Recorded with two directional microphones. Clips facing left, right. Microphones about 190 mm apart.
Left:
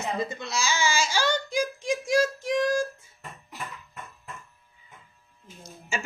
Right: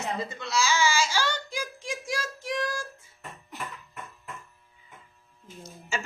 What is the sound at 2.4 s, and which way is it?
Child singing, 20° left (ahead or behind).